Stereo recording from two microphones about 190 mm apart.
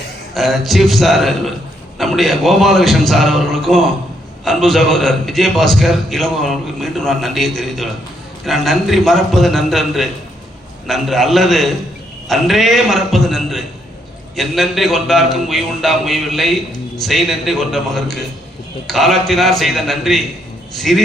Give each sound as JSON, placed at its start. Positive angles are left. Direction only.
{"t": 0.3, "sound": "a man's voice", "side_deg": 0}